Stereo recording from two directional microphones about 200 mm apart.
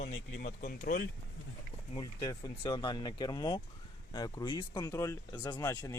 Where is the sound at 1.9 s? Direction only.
20° left (ahead or behind).